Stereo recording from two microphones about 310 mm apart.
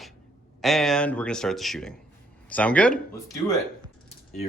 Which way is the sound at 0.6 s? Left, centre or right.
Centre.